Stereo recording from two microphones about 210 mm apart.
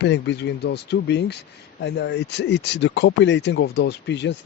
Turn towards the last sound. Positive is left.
turn(degrees=55)  # may be behind; listen again after turning